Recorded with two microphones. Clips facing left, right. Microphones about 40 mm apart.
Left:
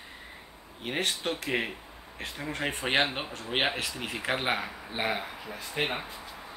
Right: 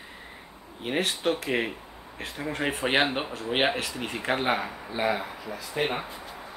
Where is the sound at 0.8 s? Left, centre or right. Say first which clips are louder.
Right 4 dB; centre.